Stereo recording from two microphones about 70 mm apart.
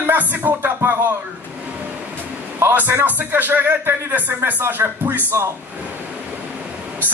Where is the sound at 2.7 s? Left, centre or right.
Right.